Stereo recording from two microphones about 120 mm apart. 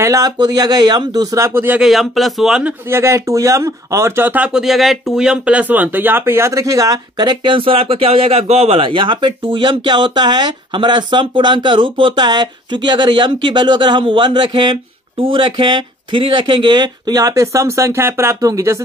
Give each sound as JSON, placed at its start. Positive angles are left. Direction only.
{"t": 0.0, "sound": "speech", "side_deg": -30}
{"t": 1.8, "sound": "speech", "side_deg": 0}
{"t": 2.9, "sound": "speech", "side_deg": -25}